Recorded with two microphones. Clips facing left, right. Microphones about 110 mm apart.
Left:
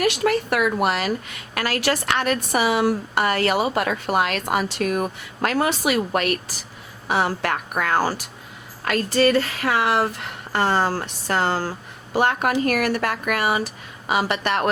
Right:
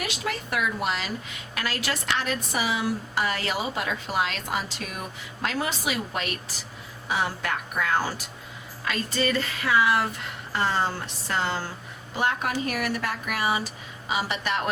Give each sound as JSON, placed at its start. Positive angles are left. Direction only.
{"t": 0.0, "sound": "speech", "side_deg": 65}